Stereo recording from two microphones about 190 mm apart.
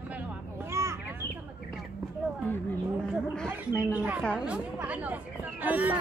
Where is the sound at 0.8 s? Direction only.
15° right (ahead or behind).